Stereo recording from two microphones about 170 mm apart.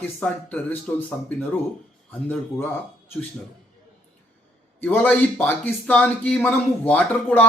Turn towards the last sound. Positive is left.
turn(degrees=10)  # may be behind; listen again after turning